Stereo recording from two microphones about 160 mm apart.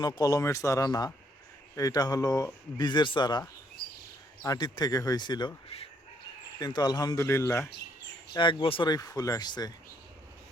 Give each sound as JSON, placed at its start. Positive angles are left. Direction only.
{"t": 0.2, "sound": "speech", "side_deg": 20}
{"t": 8.3, "sound": "speech", "side_deg": 30}